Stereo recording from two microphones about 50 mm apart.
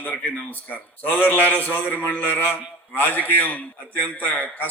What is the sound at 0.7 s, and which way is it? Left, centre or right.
A man's voice, left.